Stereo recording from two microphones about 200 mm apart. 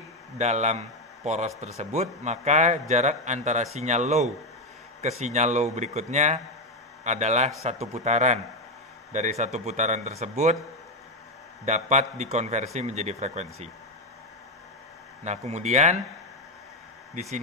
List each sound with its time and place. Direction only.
0.4 s a man's voice: 35° right (ahead or behind)
11.6 s a man's voice: 35° right (ahead or behind)
15.2 s a man's voice: 35° right (ahead or behind)
17.1 s speech: 35° right (ahead or behind)